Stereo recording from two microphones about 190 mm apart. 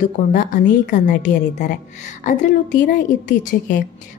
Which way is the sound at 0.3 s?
40° left (ahead or behind).